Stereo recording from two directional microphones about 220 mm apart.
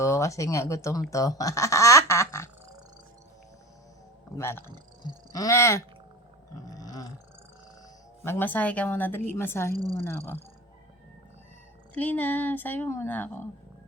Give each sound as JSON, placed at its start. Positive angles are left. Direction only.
{"t": 0.0, "sound": "speech", "side_deg": 15}
{"t": 1.1, "sound": "quack", "side_deg": 15}
{"t": 4.4, "sound": "speech", "side_deg": 10}
{"t": 4.6, "sound": "speech", "side_deg": -20}
{"t": 5.3, "sound": "speech", "side_deg": 15}
{"t": 6.7, "sound": "a sound", "side_deg": 15}
{"t": 8.2, "sound": "speech", "side_deg": 10}
{"t": 11.9, "sound": "speech", "side_deg": 10}